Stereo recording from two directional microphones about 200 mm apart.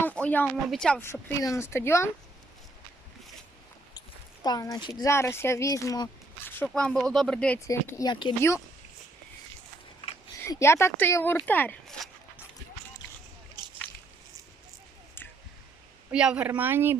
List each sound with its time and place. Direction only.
0.0 s speech: 5° left (ahead or behind)
4.4 s speech: 20° left (ahead or behind)
10.4 s speech: 15° left (ahead or behind)
16.1 s speech: 5° right (ahead or behind)